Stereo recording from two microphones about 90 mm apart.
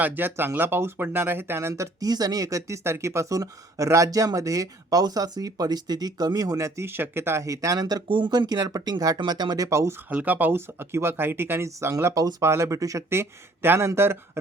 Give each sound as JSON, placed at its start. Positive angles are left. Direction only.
{"t": 0.0, "sound": "speech", "side_deg": -25}
{"t": 8.1, "sound": "speech", "side_deg": -60}
{"t": 9.6, "sound": "speech", "side_deg": -35}
{"t": 10.1, "sound": "speech", "side_deg": -20}